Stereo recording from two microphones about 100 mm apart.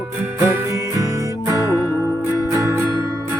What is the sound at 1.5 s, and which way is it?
Music, 30° right (ahead or behind).